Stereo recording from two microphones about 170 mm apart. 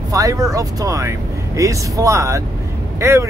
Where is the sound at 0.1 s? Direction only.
20° right (ahead or behind).